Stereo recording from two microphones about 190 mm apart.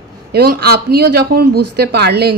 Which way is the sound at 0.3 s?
55° right (ahead or behind).